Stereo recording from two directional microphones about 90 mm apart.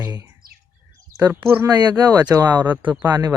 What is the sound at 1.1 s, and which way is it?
Speech, 40° left (ahead or behind).